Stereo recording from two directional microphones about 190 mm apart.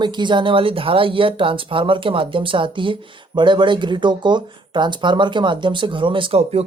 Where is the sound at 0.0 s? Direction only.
25° right (ahead or behind).